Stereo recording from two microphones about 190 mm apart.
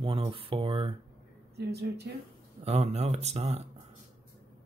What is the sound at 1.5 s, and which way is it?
Speech, 60° right (ahead or behind).